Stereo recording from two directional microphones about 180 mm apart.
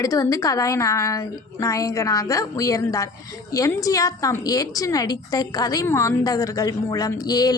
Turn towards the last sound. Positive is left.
turn(degrees=20)  # may be behind; listen again after turning